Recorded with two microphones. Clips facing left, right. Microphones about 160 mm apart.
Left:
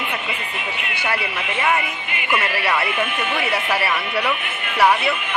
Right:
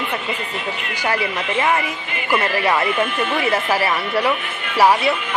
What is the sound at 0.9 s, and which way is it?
Speech, 40° right (ahead or behind).